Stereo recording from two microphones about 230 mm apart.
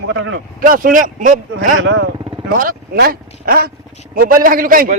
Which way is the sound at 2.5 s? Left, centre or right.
Right.